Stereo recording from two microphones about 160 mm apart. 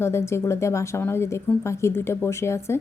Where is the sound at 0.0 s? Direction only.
15° left (ahead or behind).